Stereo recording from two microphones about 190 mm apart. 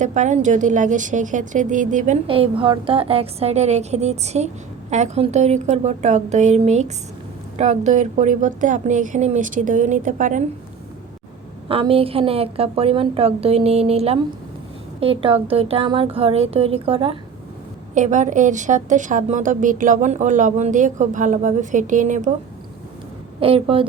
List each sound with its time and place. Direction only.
0.0 s a woman's voice: 40° right (ahead or behind)
2.2 s a woman's voice: 30° right (ahead or behind)
11.7 s a woman's voice: 30° right (ahead or behind)
17.9 s a woman's voice: 40° right (ahead or behind)
23.4 s speech: 30° right (ahead or behind)